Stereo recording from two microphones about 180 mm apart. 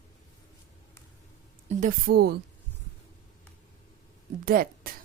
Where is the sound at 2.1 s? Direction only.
60° right (ahead or behind).